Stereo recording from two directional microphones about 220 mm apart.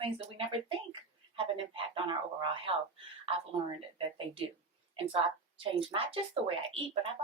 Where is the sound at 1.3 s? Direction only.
25° right (ahead or behind).